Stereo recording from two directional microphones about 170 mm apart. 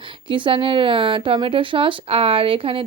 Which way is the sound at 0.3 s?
30° right (ahead or behind).